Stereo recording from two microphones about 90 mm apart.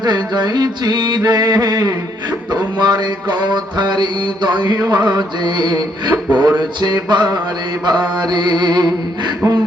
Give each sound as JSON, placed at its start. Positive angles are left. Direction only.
{"t": 0.0, "sound": "music", "side_deg": -50}
{"t": 2.5, "sound": "mantra", "side_deg": -55}
{"t": 5.1, "sound": "music", "side_deg": -50}